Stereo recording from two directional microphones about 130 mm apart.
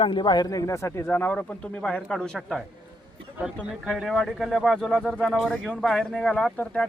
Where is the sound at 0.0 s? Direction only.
35° left (ahead or behind); by 2.6 s 5° left (ahead or behind).